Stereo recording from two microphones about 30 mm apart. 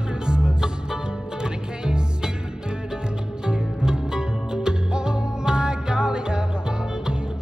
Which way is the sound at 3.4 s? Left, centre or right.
Right.